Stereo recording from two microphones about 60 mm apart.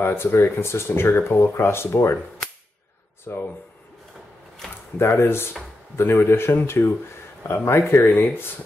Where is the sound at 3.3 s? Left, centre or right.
Left.